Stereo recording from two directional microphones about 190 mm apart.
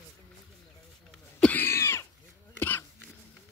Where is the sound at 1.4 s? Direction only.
10° left (ahead or behind).